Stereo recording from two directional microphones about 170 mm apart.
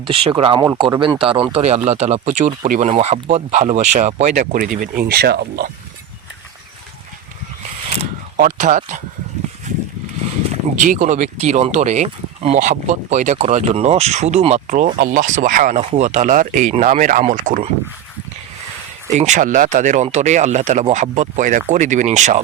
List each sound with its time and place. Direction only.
0.0 s speech: 30° right (ahead or behind); by 5.7 s 65° right (ahead or behind)
8.4 s speech: 50° right (ahead or behind)
10.5 s speech: 50° right (ahead or behind)
19.1 s speech: 45° right (ahead or behind)